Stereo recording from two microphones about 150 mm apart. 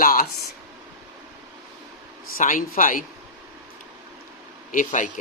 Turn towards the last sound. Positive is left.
turn(degrees=60)  # may be behind; listen again after turning